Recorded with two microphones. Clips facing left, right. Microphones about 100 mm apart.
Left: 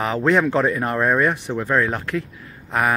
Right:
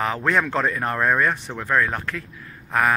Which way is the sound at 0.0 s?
20° left (ahead or behind).